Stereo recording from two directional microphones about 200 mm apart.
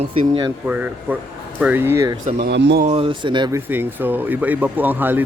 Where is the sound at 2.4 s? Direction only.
60° right (ahead or behind).